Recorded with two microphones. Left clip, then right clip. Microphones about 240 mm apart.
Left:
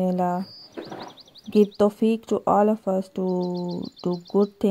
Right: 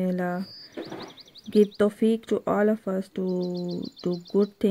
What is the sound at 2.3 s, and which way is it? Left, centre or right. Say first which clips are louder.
Speech: left 4 dB; left.